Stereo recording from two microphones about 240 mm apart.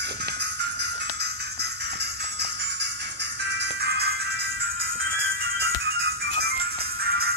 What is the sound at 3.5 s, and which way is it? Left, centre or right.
Music, right.